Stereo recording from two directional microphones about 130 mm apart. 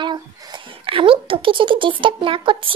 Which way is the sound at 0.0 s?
35° right (ahead or behind).